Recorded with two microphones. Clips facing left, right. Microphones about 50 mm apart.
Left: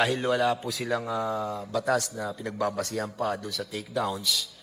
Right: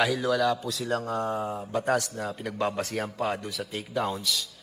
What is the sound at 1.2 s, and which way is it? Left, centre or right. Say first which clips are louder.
Mantra: even; left.